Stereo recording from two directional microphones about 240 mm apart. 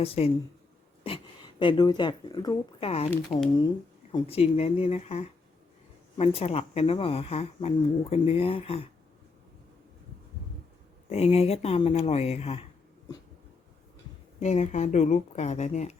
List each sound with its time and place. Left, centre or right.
0.0 s speech: left
11.1 s speech: left
14.3 s speech: left